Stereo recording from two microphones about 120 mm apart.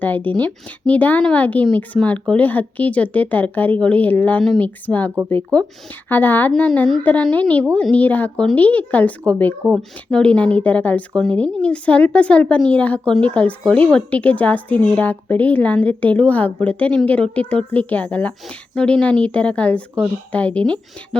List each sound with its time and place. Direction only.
0.0 s speech: 15° left (ahead or behind)